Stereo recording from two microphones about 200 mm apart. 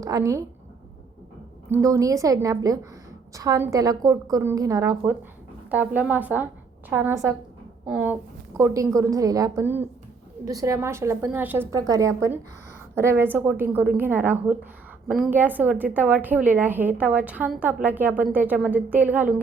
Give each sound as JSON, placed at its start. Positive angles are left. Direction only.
{"t": 0.0, "sound": "a woman's voice", "side_deg": -15}
{"t": 1.7, "sound": "a woman's voice", "side_deg": -15}